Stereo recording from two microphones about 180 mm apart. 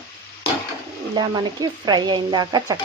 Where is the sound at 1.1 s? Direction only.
25° right (ahead or behind).